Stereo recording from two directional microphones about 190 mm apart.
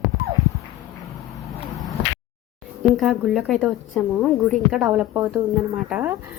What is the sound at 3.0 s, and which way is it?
Speech, centre (ahead or behind).